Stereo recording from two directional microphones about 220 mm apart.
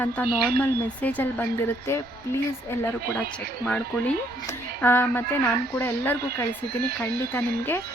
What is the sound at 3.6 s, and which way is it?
Speech, 5° left (ahead or behind).